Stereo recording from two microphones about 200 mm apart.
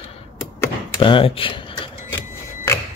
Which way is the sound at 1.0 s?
25° left (ahead or behind).